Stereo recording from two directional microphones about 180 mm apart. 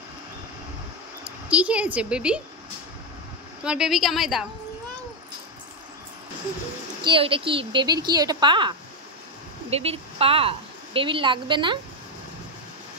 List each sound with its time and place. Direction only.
1.5 s a woman's voice: 5° right (ahead or behind)
3.6 s a woman's voice: 5° right (ahead or behind)
7.0 s a woman's voice: 30° right (ahead or behind)